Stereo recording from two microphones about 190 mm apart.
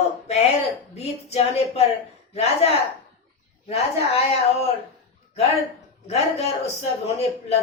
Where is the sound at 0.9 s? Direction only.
35° left (ahead or behind).